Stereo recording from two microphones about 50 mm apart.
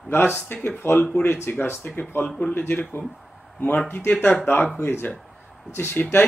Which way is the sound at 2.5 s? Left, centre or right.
Left.